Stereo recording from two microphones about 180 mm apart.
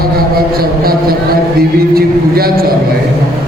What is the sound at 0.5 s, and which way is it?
A man's voice, 55° right (ahead or behind).